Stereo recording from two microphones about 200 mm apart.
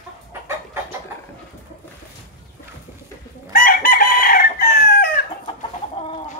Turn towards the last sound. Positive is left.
turn(degrees=50)  # may be behind; listen again after turning